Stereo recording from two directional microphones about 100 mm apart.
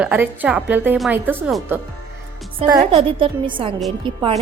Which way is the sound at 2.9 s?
70° right (ahead or behind).